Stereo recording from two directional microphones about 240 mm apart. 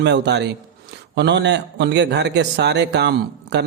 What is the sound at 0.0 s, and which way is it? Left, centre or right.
A man's voice, right.